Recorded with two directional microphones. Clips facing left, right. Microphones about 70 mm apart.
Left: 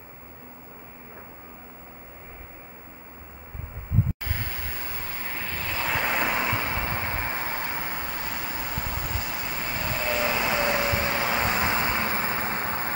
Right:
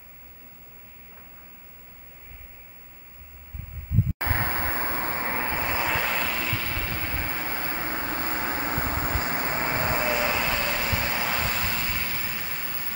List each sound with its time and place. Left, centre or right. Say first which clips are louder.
4.2 s vehicle: right 8 dB; right
5.9 s vehicle: left 4 dB; centre
6.1 s vehicle: left 3 dB; left
7.7 s vehicle: right 2 dB; right
10.2 s vehicle: even; centre
10.5 s vehicle: left 3 dB; left